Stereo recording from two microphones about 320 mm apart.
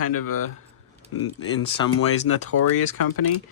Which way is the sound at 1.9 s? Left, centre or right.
Left.